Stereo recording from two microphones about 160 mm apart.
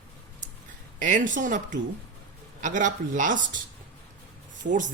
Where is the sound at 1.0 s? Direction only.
55° right (ahead or behind).